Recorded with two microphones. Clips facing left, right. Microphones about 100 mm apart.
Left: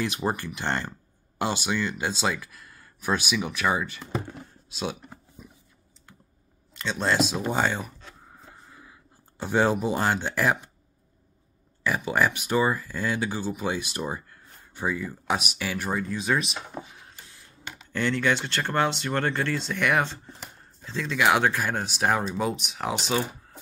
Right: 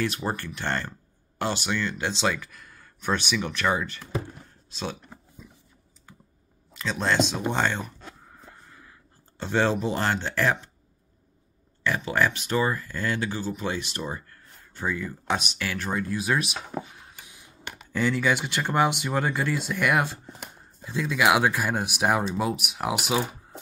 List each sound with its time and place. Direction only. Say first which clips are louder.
0.0 s speech: left 1 dB; 15° left (ahead or behind)
4.7 s a sound: left 2 dB; 15° left (ahead or behind)
6.1 s computer keyboard: right 2 dB; 5° right (ahead or behind)
6.7 s speech: even; centre (ahead or behind)
8.4 s a sound: even; 10° left (ahead or behind)
9.4 s speech: left 1 dB; 10° left (ahead or behind)
11.8 s speech: even; 10° left (ahead or behind)
17.2 s printer: right 1 dB; 15° right (ahead or behind)
17.9 s speech: right 1 dB; 5° right (ahead or behind)